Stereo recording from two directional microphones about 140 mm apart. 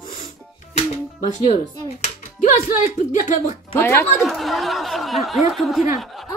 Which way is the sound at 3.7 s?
15° left (ahead or behind).